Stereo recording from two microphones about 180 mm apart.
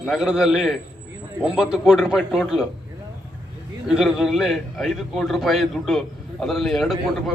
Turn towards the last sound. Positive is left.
turn(degrees=0)  # may be behind; listen again after turning